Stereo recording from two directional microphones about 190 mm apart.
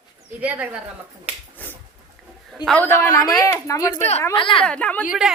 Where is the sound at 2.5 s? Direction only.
Centre (ahead or behind).